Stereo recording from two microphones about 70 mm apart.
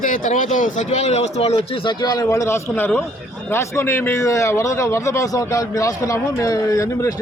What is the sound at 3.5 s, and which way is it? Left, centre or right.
Speech, left.